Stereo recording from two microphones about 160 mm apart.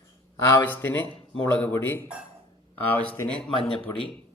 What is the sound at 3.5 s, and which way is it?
Speech, 35° left (ahead or behind).